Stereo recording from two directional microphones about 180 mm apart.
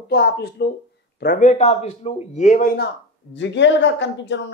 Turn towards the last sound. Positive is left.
turn(degrees=80)